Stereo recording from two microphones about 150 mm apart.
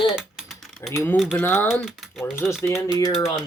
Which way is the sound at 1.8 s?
Centre (ahead or behind).